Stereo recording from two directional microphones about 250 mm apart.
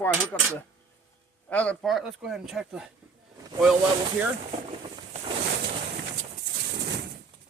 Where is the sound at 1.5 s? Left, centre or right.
Centre.